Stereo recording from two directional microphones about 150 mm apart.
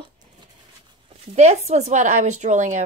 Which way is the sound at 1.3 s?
45° right (ahead or behind).